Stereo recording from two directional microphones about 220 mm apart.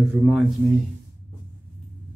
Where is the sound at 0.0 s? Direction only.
Centre (ahead or behind).